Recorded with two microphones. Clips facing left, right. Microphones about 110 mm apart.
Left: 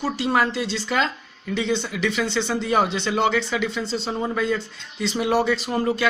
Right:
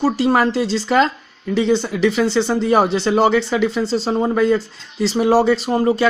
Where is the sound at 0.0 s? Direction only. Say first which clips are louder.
Right 6 dB; 35° right (ahead or behind).